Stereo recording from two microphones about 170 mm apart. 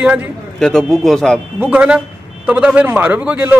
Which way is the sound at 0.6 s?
Centre (ahead or behind).